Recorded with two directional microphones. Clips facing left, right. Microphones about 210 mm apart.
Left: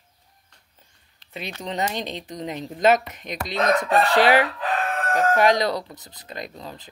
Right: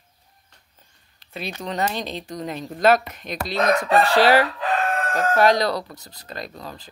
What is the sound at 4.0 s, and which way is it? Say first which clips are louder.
Chicken: right 1 dB; 15° left (ahead or behind).